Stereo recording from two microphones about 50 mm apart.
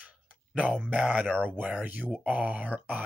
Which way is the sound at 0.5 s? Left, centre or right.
Right.